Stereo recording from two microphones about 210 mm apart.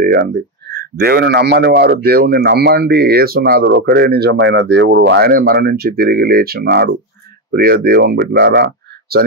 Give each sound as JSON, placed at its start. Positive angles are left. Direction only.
{"t": 0.0, "sound": "speech", "side_deg": -45}